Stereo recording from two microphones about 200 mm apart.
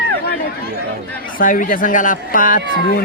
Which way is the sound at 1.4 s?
40° left (ahead or behind).